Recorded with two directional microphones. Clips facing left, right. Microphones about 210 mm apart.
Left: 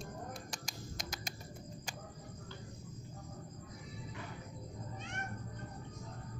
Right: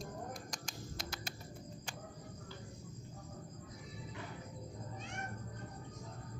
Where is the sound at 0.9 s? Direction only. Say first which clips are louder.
Even; 15° left (ahead or behind).